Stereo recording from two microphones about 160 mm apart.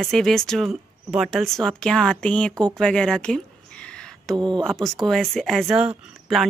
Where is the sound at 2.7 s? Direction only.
5° left (ahead or behind).